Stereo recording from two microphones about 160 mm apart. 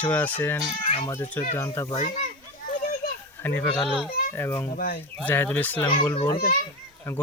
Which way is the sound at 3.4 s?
10° left (ahead or behind).